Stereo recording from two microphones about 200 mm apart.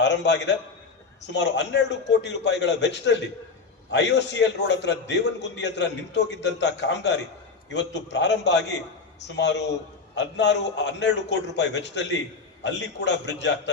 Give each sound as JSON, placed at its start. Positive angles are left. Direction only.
{"t": 0.0, "sound": "a man's voice", "side_deg": 60}